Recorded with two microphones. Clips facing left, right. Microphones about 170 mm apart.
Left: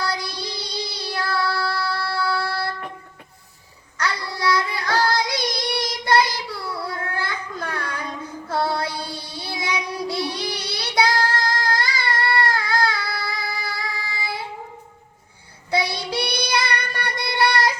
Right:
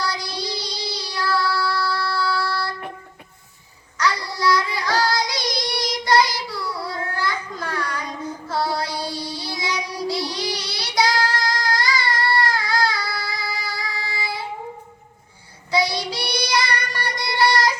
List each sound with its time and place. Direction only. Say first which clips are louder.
0.0 s child singing: even; 55° left (ahead or behind)
3.9 s child singing: right 3 dB; 55° left (ahead or behind)
8.4 s music: left 1 dB; 55° left (ahead or behind)
9.1 s child singing: right 2 dB; 55° left (ahead or behind)
15.7 s child singing: right 1 dB; 60° left (ahead or behind)